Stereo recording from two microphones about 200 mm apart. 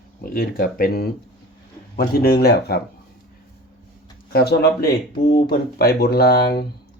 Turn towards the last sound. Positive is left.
turn(degrees=50)  # may be behind; listen again after turning